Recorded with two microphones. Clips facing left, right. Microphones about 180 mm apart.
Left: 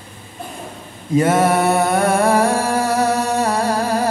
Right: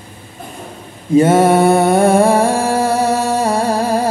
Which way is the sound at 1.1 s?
25° right (ahead or behind).